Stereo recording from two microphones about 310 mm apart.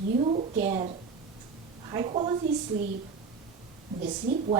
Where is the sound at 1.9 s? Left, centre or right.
Centre.